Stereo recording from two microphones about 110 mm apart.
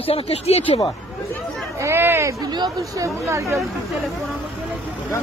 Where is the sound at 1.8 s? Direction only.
20° right (ahead or behind).